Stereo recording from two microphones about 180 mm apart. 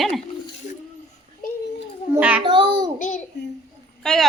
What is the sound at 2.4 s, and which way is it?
Speech, 25° right (ahead or behind).